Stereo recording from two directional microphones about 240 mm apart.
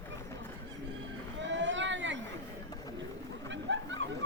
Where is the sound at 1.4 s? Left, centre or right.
Right.